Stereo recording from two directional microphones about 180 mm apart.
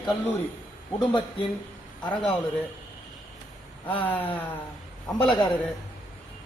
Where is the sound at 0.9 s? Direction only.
30° left (ahead or behind).